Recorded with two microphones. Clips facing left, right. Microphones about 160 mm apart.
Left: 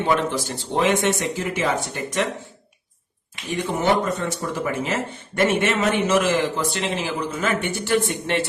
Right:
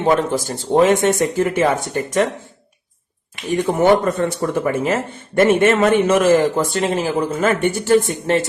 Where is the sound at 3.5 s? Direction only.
50° right (ahead or behind).